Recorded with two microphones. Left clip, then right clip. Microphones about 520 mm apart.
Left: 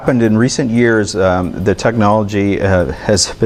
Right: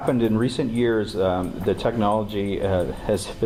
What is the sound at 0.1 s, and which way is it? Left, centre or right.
Speech, left.